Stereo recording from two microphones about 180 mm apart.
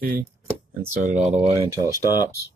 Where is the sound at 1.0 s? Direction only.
40° right (ahead or behind).